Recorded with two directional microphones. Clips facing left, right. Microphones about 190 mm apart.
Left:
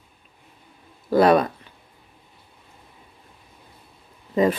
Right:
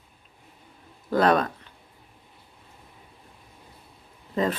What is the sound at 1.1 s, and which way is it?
Speech, 10° left (ahead or behind).